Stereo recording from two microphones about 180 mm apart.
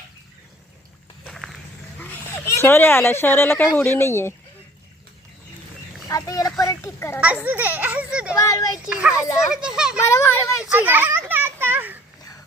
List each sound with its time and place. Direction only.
1.3 s walk: centre (ahead or behind)
2.0 s speech: 10° left (ahead or behind)
6.1 s speech: 20° left (ahead or behind)
7.2 s a child's voice: 10° right (ahead or behind)
8.4 s a child's voice: 20° left (ahead or behind)
8.9 s a child's voice: 5° right (ahead or behind)
10.1 s a child's voice: 15° left (ahead or behind)
10.6 s children playing: 10° right (ahead or behind)